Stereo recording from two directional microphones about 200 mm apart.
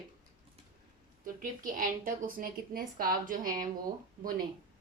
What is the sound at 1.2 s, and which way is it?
A woman's voice, 40° right (ahead or behind).